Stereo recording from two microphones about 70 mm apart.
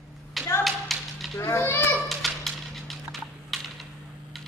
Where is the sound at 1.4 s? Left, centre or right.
Left.